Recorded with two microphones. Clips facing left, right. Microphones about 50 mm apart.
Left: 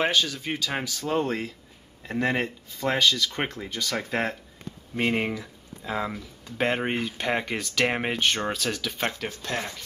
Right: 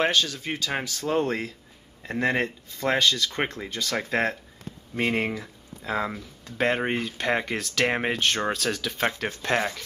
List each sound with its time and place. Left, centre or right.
0.0 s speech: centre
9.2 s speech: right